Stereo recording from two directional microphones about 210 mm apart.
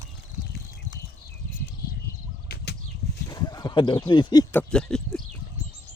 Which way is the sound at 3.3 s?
20° left (ahead or behind).